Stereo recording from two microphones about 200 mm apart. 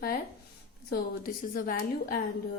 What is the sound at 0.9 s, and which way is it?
Speech, 45° left (ahead or behind).